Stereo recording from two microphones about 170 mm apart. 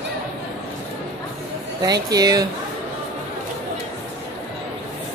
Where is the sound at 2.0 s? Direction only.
20° right (ahead or behind).